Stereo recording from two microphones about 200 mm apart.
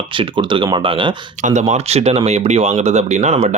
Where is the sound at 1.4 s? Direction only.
35° right (ahead or behind).